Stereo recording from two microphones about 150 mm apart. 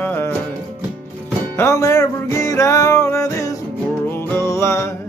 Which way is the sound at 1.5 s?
20° left (ahead or behind).